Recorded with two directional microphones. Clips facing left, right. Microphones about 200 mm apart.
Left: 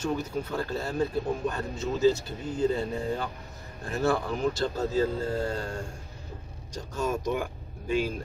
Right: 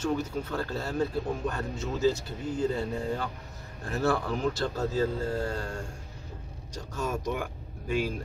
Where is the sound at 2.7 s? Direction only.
20° left (ahead or behind).